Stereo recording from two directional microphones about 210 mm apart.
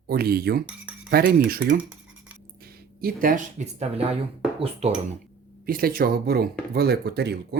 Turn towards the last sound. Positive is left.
turn(degrees=-50)  # may be behind; listen again after turning